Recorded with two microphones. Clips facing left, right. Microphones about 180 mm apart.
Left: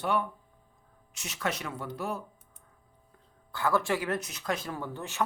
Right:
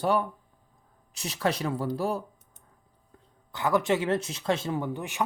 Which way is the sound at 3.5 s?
20° right (ahead or behind).